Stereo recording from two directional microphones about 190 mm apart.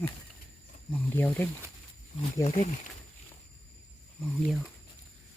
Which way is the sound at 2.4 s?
35° left (ahead or behind).